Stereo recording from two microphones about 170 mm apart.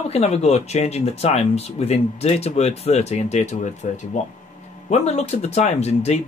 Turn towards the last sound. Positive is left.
turn(degrees=40)  # may be behind; listen again after turning